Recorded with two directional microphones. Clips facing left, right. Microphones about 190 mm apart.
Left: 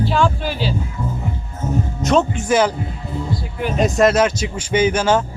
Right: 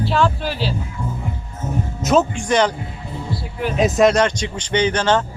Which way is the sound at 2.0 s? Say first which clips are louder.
Right 1 dB; centre (ahead or behind).